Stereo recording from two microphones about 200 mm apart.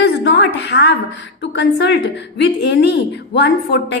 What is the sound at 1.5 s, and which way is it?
A woman's voice, 60° left (ahead or behind).